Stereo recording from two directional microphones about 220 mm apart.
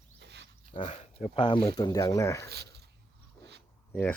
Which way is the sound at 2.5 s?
50° right (ahead or behind).